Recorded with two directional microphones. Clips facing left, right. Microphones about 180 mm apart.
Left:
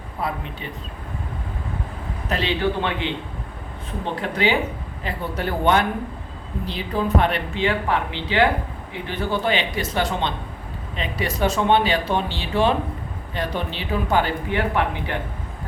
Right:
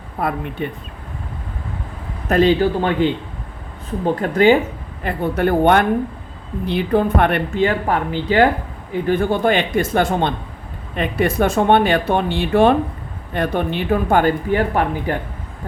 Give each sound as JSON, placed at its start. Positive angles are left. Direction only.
{"t": 0.2, "sound": "speech", "side_deg": -55}
{"t": 2.3, "sound": "speech", "side_deg": -45}